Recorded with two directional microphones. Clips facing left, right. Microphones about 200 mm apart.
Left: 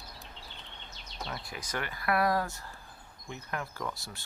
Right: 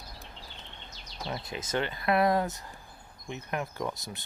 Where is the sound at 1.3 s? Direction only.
20° right (ahead or behind).